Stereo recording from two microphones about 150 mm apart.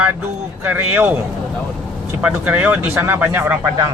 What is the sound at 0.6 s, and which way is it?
Speech, 15° right (ahead or behind).